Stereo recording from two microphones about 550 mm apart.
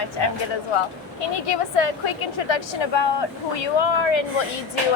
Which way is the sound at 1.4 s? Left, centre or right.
Left.